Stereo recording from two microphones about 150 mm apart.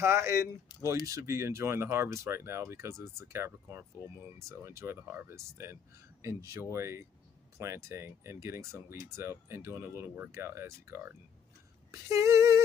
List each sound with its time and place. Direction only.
0.0 s speech: 15° right (ahead or behind)
0.7 s speech: 30° left (ahead or behind)
1.0 s speech: 20° right (ahead or behind)